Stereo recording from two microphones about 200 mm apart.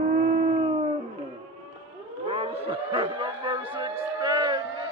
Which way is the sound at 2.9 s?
25° right (ahead or behind).